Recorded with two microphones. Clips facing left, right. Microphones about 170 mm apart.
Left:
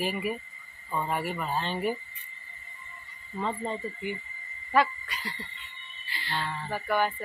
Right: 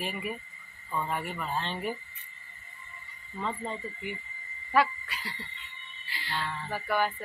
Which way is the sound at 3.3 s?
20° left (ahead or behind).